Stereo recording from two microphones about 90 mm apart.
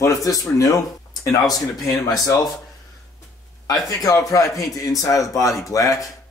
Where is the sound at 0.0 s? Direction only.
40° left (ahead or behind).